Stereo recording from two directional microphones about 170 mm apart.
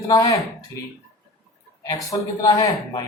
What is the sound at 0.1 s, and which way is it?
Speech, 20° left (ahead or behind).